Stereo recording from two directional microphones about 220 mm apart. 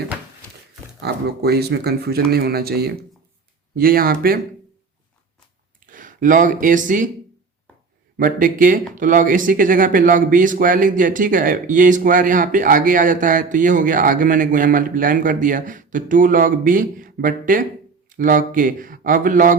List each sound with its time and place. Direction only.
1.0 s speech: 45° right (ahead or behind)
5.8 s speech: 40° right (ahead or behind)
8.2 s speech: 40° right (ahead or behind)